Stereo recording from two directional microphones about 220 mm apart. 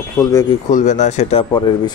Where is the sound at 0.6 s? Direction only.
35° left (ahead or behind).